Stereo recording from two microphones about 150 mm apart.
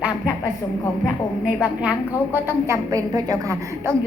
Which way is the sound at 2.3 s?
15° right (ahead or behind).